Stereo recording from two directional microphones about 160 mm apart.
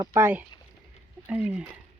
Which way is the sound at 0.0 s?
15° right (ahead or behind).